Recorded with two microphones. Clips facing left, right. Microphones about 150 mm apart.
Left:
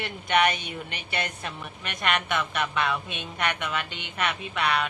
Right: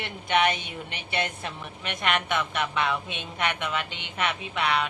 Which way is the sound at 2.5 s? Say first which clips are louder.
Even; centre (ahead or behind).